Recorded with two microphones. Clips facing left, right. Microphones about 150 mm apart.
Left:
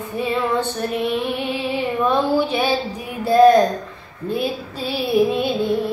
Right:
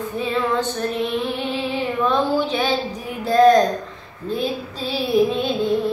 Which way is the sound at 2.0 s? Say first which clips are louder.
Left 1 dB; 10° left (ahead or behind).